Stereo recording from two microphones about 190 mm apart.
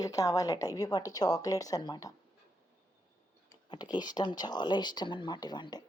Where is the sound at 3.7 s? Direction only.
25° left (ahead or behind).